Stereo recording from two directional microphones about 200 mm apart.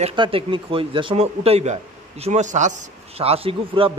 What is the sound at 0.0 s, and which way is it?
A man's voice, 25° right (ahead or behind).